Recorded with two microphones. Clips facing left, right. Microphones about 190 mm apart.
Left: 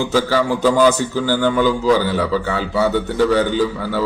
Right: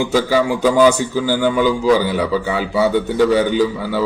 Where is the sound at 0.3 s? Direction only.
15° right (ahead or behind).